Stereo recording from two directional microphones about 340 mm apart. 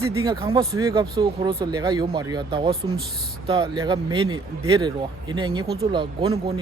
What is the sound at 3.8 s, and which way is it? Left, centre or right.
Speech, centre.